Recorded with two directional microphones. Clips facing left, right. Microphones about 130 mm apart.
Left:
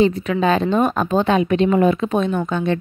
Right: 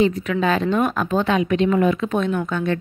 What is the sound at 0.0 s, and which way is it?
A woman's voice, 30° left (ahead or behind).